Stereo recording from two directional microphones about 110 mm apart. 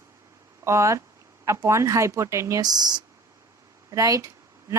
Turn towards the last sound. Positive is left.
turn(degrees=-30)  # may be behind; listen again after turning